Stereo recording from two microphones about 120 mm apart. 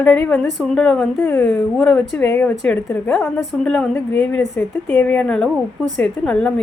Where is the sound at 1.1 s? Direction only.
20° left (ahead or behind).